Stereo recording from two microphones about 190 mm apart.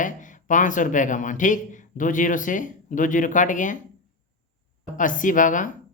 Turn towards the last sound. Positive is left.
turn(degrees=45)  # may be behind; listen again after turning